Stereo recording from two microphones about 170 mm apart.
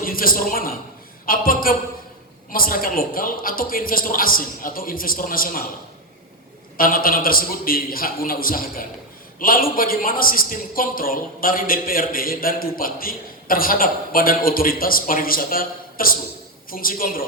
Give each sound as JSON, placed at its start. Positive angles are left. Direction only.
{"t": 0.0, "sound": "a man's voice", "side_deg": 55}
{"t": 6.7, "sound": "a man's voice", "side_deg": 55}